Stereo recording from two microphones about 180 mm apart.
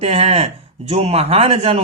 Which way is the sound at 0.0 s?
35° right (ahead or behind).